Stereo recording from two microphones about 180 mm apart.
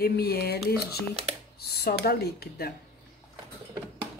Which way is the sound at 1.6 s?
60° left (ahead or behind).